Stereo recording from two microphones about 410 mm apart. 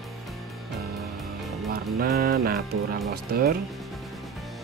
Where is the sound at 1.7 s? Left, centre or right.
Right.